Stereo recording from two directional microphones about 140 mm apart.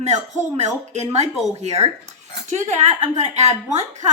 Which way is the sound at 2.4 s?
60° right (ahead or behind).